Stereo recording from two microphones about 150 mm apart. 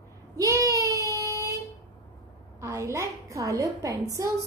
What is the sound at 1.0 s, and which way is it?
Child singing, 20° left (ahead or behind).